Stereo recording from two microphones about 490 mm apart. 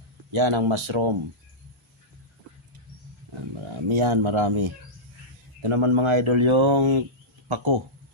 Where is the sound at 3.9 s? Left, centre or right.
Right.